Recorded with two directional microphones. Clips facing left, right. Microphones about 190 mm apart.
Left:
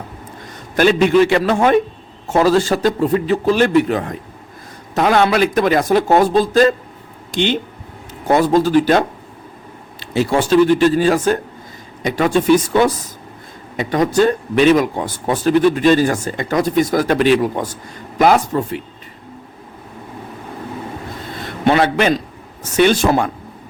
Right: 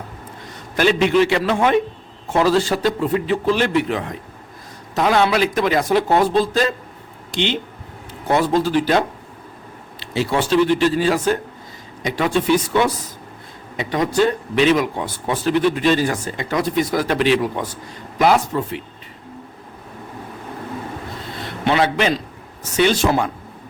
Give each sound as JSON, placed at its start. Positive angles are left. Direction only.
{"t": 0.8, "sound": "speech", "side_deg": 45}
{"t": 21.6, "sound": "a man's voice", "side_deg": 50}